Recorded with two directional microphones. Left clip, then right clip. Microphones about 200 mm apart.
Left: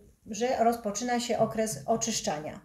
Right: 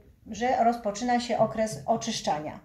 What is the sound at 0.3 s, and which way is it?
A woman's voice, 40° left (ahead or behind).